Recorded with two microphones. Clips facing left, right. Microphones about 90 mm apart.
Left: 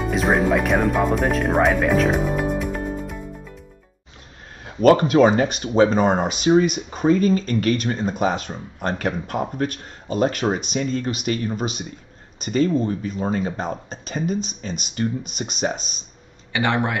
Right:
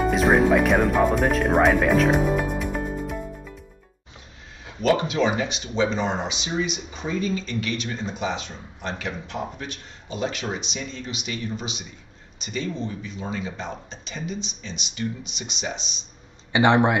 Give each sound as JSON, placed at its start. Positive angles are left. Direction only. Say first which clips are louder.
{"t": 0.1, "sound": "speech", "louder": "left 1 dB", "side_deg": 0}
{"t": 4.8, "sound": "speech", "louder": "left 7 dB", "side_deg": 50}
{"t": 16.5, "sound": "speech", "louder": "right 4 dB", "side_deg": -20}